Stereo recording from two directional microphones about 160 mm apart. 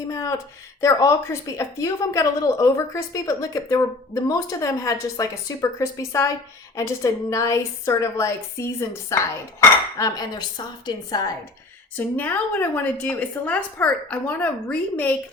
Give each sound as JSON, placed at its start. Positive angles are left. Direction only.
{"t": 0.1, "sound": "a woman's voice", "side_deg": 20}
{"t": 11.9, "sound": "a woman's voice", "side_deg": 10}